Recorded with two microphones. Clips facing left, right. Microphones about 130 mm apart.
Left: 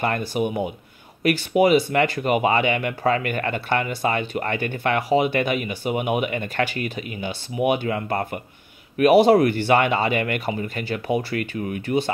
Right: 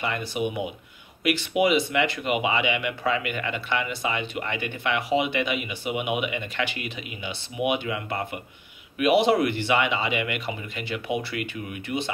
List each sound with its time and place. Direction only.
0.0 s speech: 45° left (ahead or behind)